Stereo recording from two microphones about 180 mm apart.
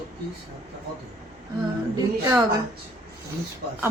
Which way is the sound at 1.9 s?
20° right (ahead or behind).